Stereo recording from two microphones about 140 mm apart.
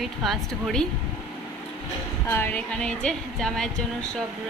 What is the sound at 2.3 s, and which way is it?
Speech, 15° left (ahead or behind).